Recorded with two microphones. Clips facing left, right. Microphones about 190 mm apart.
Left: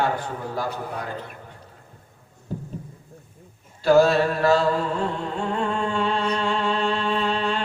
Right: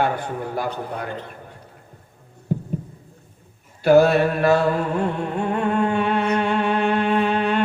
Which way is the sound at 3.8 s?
60° right (ahead or behind).